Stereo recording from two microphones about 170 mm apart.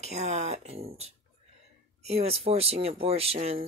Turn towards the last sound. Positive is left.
turn(degrees=-35)  # may be behind; listen again after turning